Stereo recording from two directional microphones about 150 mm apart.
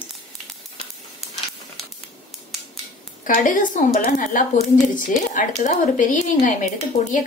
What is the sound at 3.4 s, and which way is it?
Speech, 60° left (ahead or behind).